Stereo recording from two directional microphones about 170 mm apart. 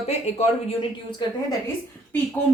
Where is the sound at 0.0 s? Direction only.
40° left (ahead or behind).